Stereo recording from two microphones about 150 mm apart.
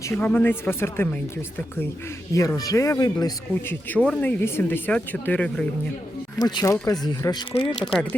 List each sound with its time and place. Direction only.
0.1 s speech: 15° left (ahead or behind)
2.3 s speech: 20° left (ahead or behind)
3.5 s speech: 10° left (ahead or behind)
6.4 s speech: 25° left (ahead or behind)
7.5 s speech: 35° left (ahead or behind)